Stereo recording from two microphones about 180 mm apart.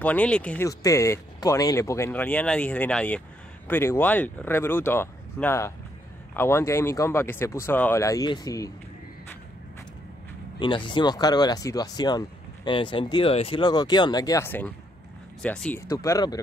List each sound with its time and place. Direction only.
0.0 s speech: 10° left (ahead or behind)
0.7 s speech: 15° left (ahead or behind)
10.6 s speech: 25° left (ahead or behind); by 15.8 s 5° left (ahead or behind)
15.9 s speech: 20° left (ahead or behind)